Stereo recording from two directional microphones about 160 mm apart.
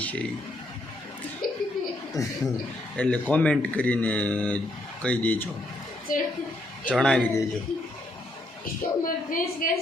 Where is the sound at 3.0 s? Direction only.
10° left (ahead or behind).